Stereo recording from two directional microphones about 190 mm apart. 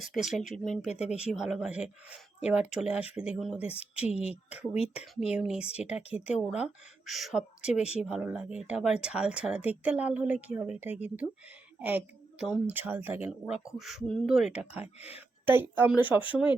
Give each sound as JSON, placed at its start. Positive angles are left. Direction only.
{"t": 0.0, "sound": "speech", "side_deg": 0}
{"t": 0.9, "sound": "speech", "side_deg": 35}
{"t": 1.1, "sound": "speech", "side_deg": -5}
{"t": 4.7, "sound": "speech", "side_deg": 35}
{"t": 5.3, "sound": "a woman's voice", "side_deg": -5}